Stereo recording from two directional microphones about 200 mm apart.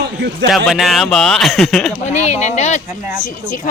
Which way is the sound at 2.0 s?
35° left (ahead or behind).